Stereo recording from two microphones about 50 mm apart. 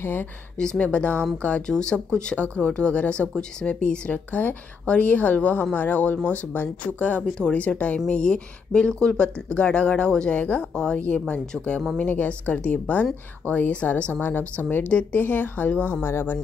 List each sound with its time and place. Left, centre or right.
0.0 s speech: left
0.7 s speech: left
2.3 s speech: left
12.0 s speech: left
14.2 s speech: left
16.0 s speech: left